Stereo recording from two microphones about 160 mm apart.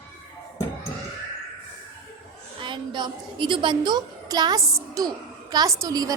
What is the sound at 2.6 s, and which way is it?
A child's voice, 30° right (ahead or behind).